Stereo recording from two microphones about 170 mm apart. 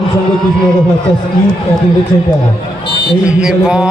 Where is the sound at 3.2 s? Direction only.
5° right (ahead or behind).